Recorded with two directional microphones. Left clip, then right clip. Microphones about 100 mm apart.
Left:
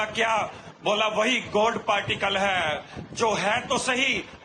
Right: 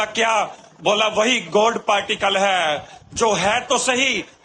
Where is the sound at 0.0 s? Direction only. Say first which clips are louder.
Right 6 dB; 45° right (ahead or behind).